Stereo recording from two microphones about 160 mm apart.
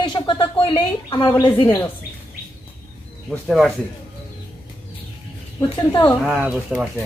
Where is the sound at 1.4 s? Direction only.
30° left (ahead or behind).